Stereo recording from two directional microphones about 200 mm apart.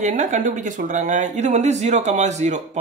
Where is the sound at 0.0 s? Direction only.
40° right (ahead or behind).